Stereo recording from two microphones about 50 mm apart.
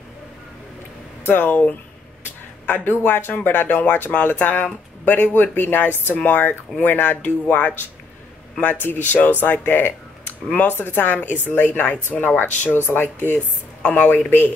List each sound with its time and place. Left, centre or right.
1.3 s speech: left
13.8 s speech: left